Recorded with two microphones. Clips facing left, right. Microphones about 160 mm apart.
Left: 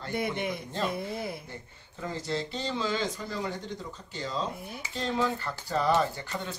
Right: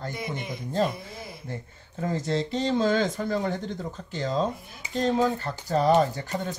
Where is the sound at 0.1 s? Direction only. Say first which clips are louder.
Left 3 dB; 60° left (ahead or behind).